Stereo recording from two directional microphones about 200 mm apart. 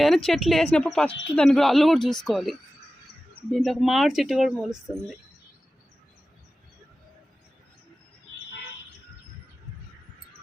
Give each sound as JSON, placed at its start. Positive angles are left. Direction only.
{"t": 0.0, "sound": "speech", "side_deg": 0}